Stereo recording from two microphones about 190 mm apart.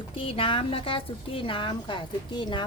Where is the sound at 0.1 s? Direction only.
30° left (ahead or behind).